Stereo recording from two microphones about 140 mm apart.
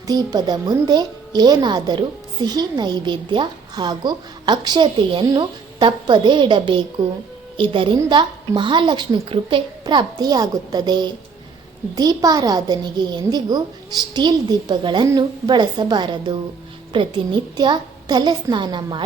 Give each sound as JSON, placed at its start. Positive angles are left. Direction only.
{"t": 0.1, "sound": "a woman's voice", "side_deg": -30}